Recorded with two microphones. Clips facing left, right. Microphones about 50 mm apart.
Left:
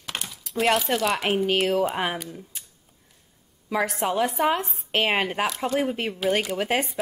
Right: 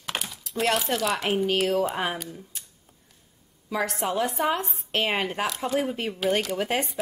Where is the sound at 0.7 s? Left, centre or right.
Centre.